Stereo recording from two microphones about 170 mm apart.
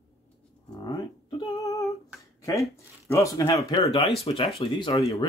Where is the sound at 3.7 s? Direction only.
30° left (ahead or behind).